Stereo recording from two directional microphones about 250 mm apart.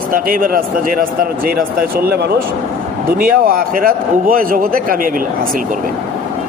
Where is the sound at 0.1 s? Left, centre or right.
Right.